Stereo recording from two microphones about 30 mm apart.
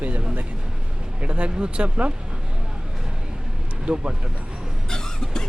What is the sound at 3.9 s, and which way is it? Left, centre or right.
Speech, right.